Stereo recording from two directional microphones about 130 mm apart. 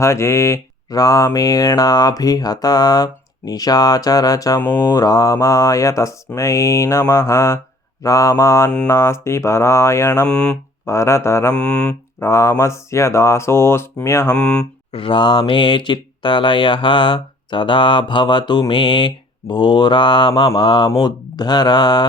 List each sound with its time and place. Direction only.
0.0 s speech: 20° left (ahead or behind)
10.2 s mantra: 5° left (ahead or behind)
10.8 s speech: 25° left (ahead or behind)
11.5 s mantra: 10° left (ahead or behind)
12.2 s speech: 25° left (ahead or behind)
14.3 s mantra: 5° left (ahead or behind)
14.9 s speech: 40° left (ahead or behind)